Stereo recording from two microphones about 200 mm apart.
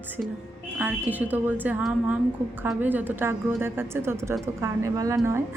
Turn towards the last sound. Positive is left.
turn(degrees=-15)  # may be behind; listen again after turning